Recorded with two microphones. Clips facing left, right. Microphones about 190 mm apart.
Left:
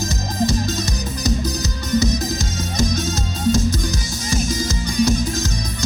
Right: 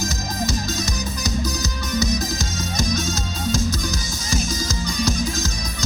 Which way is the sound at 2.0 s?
55° left (ahead or behind).